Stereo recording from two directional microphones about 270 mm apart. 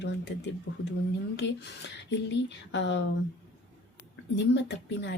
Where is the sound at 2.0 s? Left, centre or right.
Left.